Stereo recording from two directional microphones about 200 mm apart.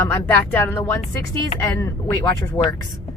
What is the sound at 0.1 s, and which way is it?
Speech, 10° left (ahead or behind).